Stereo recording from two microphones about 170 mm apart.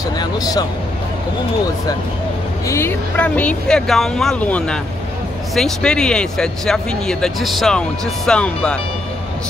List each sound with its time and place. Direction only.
0.2 s speech: 25° left (ahead or behind)
2.7 s speech: 15° left (ahead or behind)